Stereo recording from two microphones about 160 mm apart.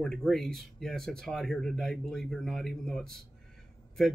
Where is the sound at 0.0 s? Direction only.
5° left (ahead or behind).